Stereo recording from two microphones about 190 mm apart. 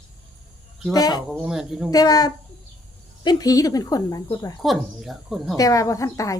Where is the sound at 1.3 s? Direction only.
Centre (ahead or behind).